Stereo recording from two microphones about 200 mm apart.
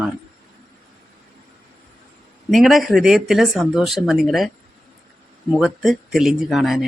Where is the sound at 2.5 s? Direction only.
Centre (ahead or behind).